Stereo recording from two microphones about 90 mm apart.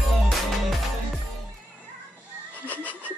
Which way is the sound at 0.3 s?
Centre (ahead or behind).